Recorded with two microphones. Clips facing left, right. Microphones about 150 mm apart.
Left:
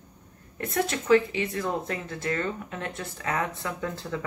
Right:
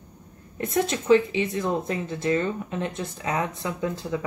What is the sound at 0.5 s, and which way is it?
Speech, 20° right (ahead or behind).